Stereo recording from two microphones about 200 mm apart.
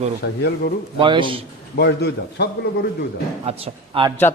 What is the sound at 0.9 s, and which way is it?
Speech, 25° right (ahead or behind).